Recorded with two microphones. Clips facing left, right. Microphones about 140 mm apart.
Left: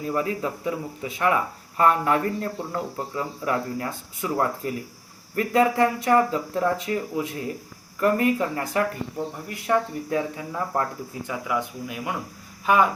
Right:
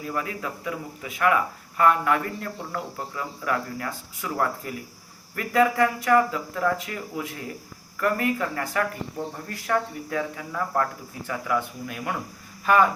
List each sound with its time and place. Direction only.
0.0 s speech: 30° left (ahead or behind)